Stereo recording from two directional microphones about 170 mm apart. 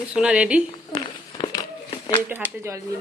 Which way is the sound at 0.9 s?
25° left (ahead or behind).